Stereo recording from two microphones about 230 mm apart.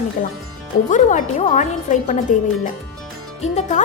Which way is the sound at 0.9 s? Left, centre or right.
Left.